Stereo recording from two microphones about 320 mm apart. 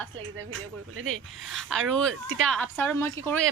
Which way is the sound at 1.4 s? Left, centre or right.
Centre.